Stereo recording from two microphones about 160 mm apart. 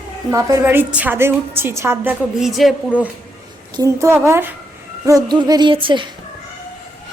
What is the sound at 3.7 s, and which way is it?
A woman's voice, 20° right (ahead or behind).